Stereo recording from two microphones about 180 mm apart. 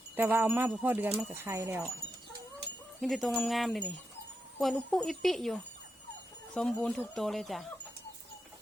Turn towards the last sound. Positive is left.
turn(degrees=0)  # may be behind; listen again after turning